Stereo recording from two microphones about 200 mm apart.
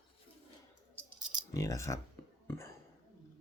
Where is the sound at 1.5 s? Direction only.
15° left (ahead or behind).